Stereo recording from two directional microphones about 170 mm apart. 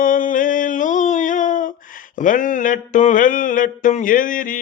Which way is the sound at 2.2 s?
50° left (ahead or behind).